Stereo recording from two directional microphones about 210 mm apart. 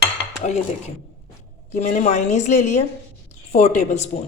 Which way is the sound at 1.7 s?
35° left (ahead or behind).